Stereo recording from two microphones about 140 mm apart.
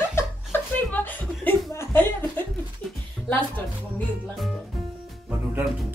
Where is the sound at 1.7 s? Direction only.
15° left (ahead or behind).